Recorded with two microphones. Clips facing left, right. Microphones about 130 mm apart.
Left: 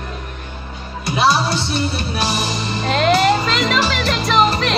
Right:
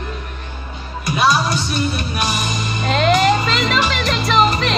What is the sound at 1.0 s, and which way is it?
Music, 30° left (ahead or behind).